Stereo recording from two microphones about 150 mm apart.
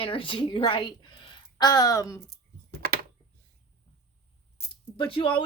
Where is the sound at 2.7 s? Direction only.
90° right.